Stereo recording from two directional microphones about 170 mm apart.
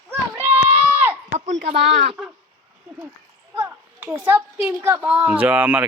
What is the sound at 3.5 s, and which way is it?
Speech, 10° right (ahead or behind).